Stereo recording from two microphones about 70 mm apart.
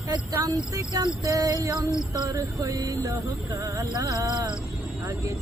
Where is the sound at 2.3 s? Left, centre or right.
Right.